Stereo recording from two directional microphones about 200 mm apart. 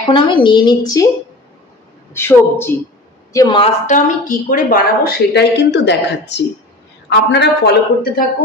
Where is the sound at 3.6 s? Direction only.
40° left (ahead or behind).